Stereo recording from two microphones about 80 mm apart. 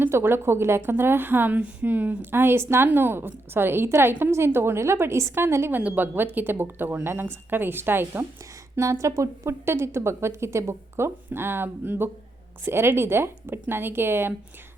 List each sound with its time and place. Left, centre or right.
0.0 s a woman's voice: right
5.8 s a woman's voice: right
8.7 s a woman's voice: right